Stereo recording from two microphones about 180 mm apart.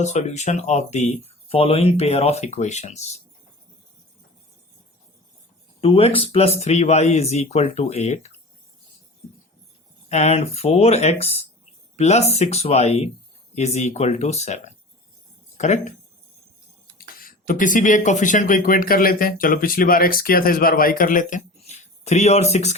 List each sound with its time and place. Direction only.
0.0 s speech: 40° left (ahead or behind)
5.8 s speech: 30° left (ahead or behind)
10.1 s speech: 40° left (ahead or behind)
17.2 s speech: 50° left (ahead or behind)